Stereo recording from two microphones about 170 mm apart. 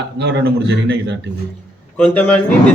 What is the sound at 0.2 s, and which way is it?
Speech, 85° right.